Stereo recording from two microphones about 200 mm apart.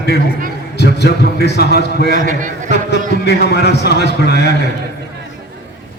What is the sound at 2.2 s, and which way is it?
Speech, 40° right (ahead or behind).